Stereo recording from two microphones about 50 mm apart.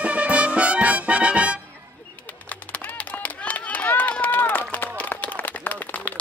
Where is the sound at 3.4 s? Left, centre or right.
Left.